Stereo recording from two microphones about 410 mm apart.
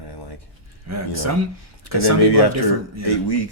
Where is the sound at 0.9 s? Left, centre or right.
Right.